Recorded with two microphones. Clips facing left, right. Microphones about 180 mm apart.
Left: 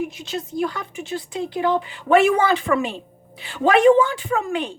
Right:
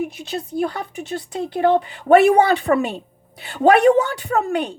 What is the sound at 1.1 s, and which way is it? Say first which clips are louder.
Speech: even; 45° right (ahead or behind).